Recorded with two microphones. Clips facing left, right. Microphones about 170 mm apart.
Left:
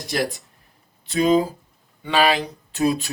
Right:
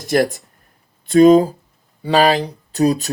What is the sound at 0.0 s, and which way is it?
Speech, 50° right (ahead or behind).